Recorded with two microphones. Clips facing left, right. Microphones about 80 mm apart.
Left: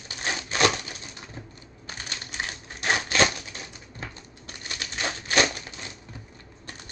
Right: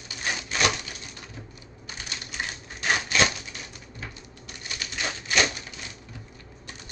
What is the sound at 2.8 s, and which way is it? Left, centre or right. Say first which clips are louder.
Typewriter: left 1 dB; left.